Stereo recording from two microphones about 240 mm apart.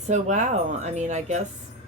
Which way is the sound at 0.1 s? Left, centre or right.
Right.